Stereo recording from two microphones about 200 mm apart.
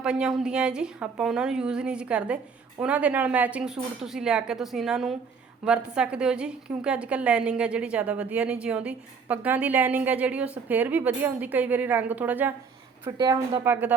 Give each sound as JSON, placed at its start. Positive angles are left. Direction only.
{"t": 0.0, "sound": "a woman's voice", "side_deg": -5}
{"t": 13.1, "sound": "a woman's voice", "side_deg": -20}